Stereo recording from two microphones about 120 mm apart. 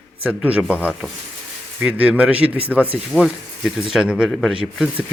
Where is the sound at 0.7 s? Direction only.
15° left (ahead or behind).